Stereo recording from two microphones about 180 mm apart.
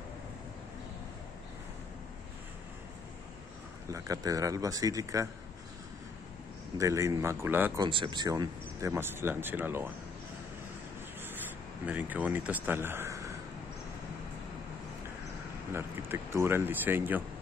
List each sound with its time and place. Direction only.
3.9 s a man's voice: 20° right (ahead or behind)
6.8 s speech: 15° right (ahead or behind)
7.8 s speech: 25° right (ahead or behind)
11.8 s speech: 10° right (ahead or behind)
15.7 s speech: 15° right (ahead or behind)